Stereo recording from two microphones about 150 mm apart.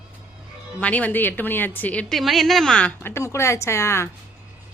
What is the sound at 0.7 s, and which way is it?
A woman's voice, 10° left (ahead or behind).